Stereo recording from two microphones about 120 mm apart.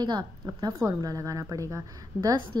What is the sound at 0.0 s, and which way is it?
A woman's voice, 35° right (ahead or behind).